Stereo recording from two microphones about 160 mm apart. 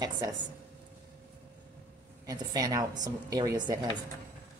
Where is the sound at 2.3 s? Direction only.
25° right (ahead or behind).